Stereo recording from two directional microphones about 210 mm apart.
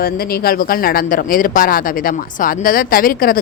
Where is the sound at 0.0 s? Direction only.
45° left (ahead or behind).